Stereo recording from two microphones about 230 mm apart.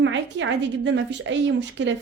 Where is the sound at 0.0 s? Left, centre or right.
Right.